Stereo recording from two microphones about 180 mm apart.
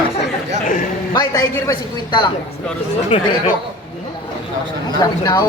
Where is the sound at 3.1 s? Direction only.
30° left (ahead or behind).